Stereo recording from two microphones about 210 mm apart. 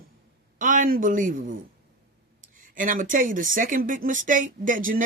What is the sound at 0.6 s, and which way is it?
Speech, 40° right (ahead or behind).